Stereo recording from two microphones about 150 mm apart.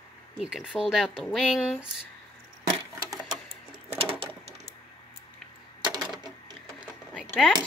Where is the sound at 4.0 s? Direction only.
40° right (ahead or behind).